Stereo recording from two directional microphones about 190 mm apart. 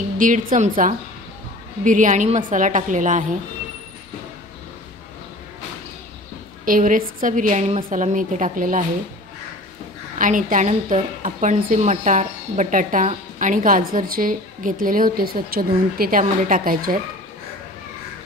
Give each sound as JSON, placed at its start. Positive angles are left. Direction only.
{"t": 0.2, "sound": "a woman's voice", "side_deg": -45}
{"t": 6.6, "sound": "a woman's voice", "side_deg": -45}
{"t": 10.1, "sound": "a woman's voice", "side_deg": -45}